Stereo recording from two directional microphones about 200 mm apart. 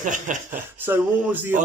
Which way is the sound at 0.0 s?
40° right (ahead or behind).